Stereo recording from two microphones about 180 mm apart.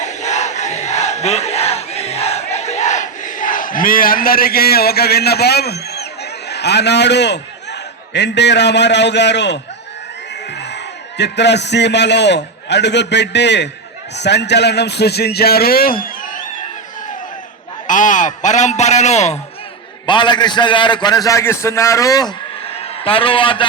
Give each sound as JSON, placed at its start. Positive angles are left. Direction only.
{"t": 0.0, "sound": "crowd", "side_deg": 40}
{"t": 6.5, "sound": "a man's voice", "side_deg": 70}
{"t": 11.2, "sound": "a man's voice", "side_deg": 70}
{"t": 17.8, "sound": "a man's voice", "side_deg": 45}
{"t": 20.1, "sound": "a man's voice", "side_deg": 25}
{"t": 22.6, "sound": "a sound", "side_deg": 35}